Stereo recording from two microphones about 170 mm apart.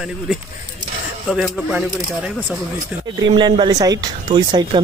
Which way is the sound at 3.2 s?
25° right (ahead or behind).